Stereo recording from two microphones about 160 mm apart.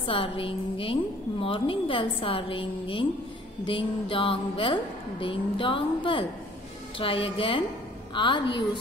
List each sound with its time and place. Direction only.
0.0 s a woman's voice: 35° left (ahead or behind)